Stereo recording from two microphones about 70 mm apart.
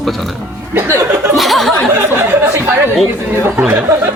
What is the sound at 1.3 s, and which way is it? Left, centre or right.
Speech, centre.